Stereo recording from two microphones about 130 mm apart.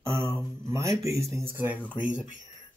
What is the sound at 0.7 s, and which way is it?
Speech, 25° right (ahead or behind).